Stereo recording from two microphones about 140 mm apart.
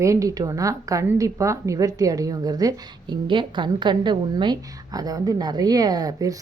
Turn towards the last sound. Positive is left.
turn(degrees=-25)  # may be behind; listen again after turning